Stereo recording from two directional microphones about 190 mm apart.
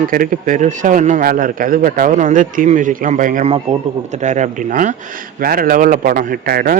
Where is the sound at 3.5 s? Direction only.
35° right (ahead or behind); by 6.8 s 50° right (ahead or behind).